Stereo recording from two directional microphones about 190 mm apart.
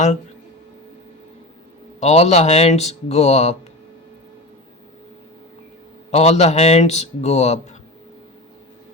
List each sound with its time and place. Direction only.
2.0 s speech: 35° left (ahead or behind)
6.1 s speech: 35° left (ahead or behind)